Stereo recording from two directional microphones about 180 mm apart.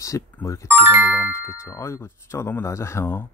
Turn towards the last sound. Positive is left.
turn(degrees=15)  # may be behind; listen again after turning